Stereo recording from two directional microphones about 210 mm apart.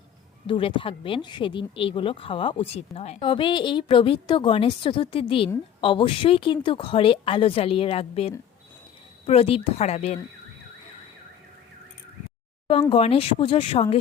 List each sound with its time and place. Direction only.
0.4 s speech: 25° left (ahead or behind)
12.9 s speech: 25° left (ahead or behind)